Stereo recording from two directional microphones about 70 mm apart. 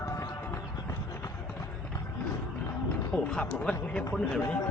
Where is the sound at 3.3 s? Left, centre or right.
Centre.